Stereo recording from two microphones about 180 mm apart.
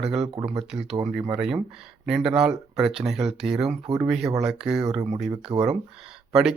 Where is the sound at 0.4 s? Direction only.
5° right (ahead or behind).